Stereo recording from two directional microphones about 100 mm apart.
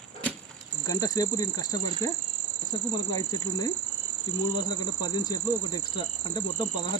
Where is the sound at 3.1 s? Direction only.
40° left (ahead or behind).